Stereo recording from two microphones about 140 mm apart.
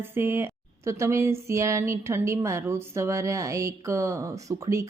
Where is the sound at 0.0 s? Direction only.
15° right (ahead or behind).